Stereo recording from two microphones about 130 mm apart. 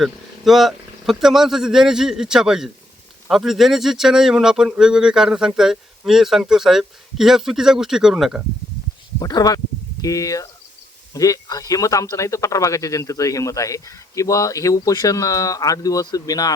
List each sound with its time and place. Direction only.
0.0 s speech: centre (ahead or behind)
9.1 s speech: 30° left (ahead or behind)